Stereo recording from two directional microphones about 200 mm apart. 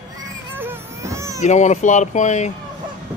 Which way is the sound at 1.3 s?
35° left (ahead or behind).